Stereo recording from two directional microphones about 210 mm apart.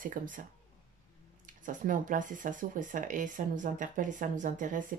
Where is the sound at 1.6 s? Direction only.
40° right (ahead or behind).